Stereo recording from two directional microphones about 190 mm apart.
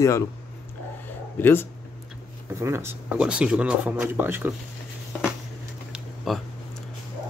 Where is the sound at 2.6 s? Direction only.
15° right (ahead or behind).